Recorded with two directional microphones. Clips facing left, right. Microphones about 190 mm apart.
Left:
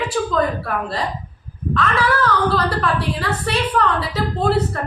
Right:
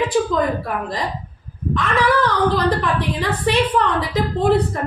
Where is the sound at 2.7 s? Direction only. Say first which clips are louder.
Right 1 dB; 15° right (ahead or behind).